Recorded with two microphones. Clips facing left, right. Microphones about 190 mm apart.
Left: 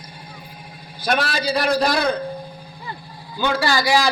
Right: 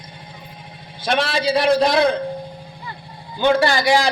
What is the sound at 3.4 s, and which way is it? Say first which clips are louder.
Speech: right 4 dB; 25° right (ahead or behind).